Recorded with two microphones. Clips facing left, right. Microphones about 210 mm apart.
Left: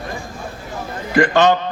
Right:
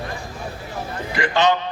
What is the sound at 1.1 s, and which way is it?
Speech, 50° left (ahead or behind).